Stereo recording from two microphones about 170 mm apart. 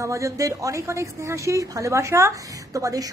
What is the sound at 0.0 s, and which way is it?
A woman's voice, 20° right (ahead or behind).